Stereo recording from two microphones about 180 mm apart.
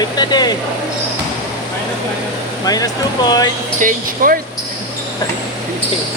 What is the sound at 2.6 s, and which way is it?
Speech, 20° left (ahead or behind).